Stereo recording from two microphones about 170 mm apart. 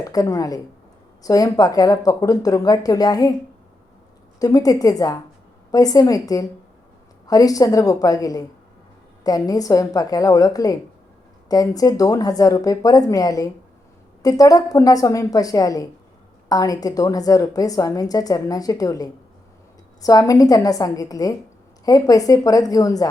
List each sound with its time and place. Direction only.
0.0 s a woman's voice: 20° left (ahead or behind)
4.4 s a woman's voice: 20° left (ahead or behind)